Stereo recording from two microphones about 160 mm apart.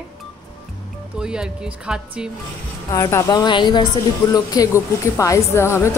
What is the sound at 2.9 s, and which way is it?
A woman's voice, 20° left (ahead or behind).